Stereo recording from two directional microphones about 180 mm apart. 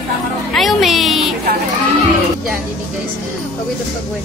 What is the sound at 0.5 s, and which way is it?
Speech, centre (ahead or behind).